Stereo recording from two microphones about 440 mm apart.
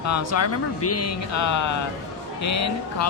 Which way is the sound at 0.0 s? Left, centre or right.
Left.